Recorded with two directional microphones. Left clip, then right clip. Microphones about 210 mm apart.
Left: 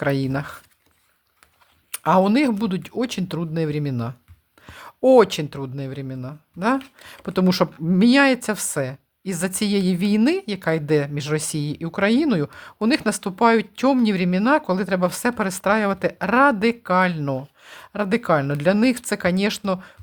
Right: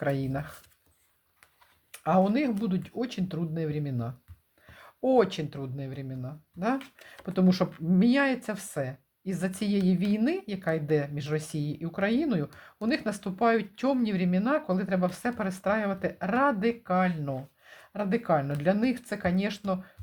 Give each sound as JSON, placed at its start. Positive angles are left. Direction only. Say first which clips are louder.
{"t": 0.0, "sound": "a woman's voice", "louder": "left 7 dB", "side_deg": 25}
{"t": 1.9, "sound": "a woman's voice", "louder": "left 8 dB", "side_deg": 30}